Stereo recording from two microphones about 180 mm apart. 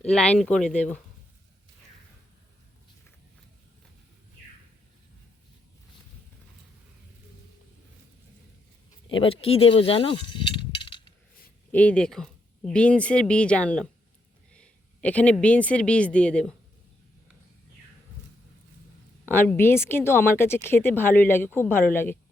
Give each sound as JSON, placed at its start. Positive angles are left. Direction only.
{"t": 0.0, "sound": "speech", "side_deg": 5}
{"t": 9.2, "sound": "speech", "side_deg": 30}
{"t": 11.7, "sound": "speech", "side_deg": 5}
{"t": 19.2, "sound": "speech", "side_deg": 10}